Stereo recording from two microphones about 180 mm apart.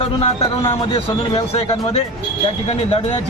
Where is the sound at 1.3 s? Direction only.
35° left (ahead or behind).